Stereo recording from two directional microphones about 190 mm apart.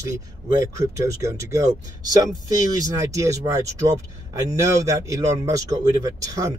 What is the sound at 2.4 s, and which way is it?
Speech, 15° right (ahead or behind).